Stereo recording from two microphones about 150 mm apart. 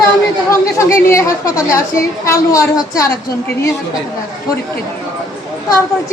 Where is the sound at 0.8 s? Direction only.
20° left (ahead or behind).